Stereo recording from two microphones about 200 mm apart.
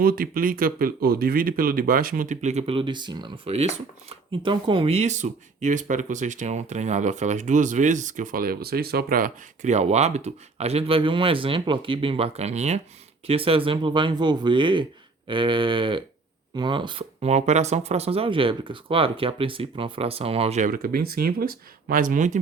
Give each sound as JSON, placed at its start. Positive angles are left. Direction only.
{"t": 0.0, "sound": "speech", "side_deg": -45}
{"t": 20.7, "sound": "speech", "side_deg": -45}